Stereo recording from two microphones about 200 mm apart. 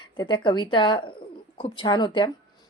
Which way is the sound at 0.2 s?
25° left (ahead or behind).